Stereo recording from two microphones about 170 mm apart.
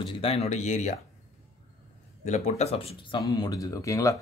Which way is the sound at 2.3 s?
40° left (ahead or behind).